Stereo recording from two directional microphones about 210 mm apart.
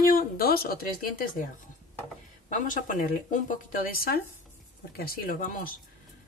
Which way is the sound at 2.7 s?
40° left (ahead or behind).